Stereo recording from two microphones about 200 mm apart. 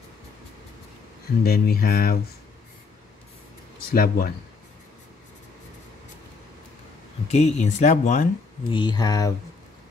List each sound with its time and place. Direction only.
1.4 s mantra: 50° left (ahead or behind)
3.9 s mantra: 45° left (ahead or behind)
7.2 s speech: 35° left (ahead or behind)
8.6 s speech: 25° left (ahead or behind)